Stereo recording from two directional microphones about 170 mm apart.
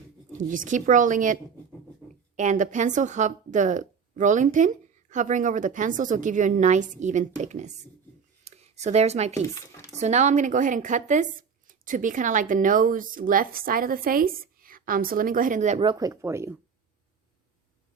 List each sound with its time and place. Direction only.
0.3 s speech: 50° right (ahead or behind)
8.4 s a sound: 40° right (ahead or behind)
9.9 s speech: 40° right (ahead or behind)
15.8 s speech: 25° right (ahead or behind)